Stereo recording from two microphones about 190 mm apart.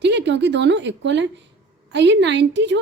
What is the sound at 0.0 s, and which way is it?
A woman's voice, 65° right (ahead or behind).